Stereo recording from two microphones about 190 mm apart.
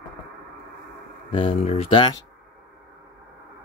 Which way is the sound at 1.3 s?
30° left (ahead or behind).